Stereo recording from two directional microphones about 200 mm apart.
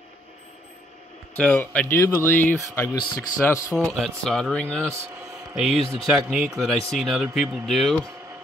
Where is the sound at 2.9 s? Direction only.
20° left (ahead or behind).